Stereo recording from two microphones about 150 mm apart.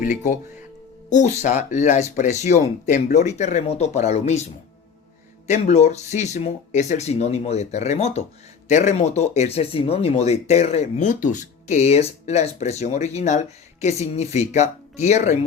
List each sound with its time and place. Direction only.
1.1 s speech: 50° left (ahead or behind)
5.5 s speech: 45° left (ahead or behind)